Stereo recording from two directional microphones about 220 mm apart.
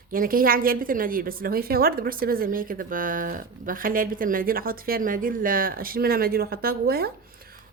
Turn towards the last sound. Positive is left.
turn(degrees=-45)  # may be behind; listen again after turning